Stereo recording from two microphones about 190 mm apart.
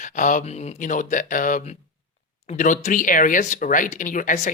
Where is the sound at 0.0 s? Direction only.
40° left (ahead or behind).